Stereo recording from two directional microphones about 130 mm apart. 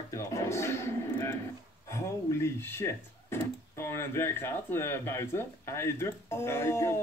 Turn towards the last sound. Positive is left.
turn(degrees=20)  # may be behind; listen again after turning